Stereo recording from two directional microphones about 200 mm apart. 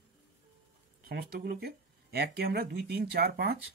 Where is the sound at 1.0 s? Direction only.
50° right (ahead or behind).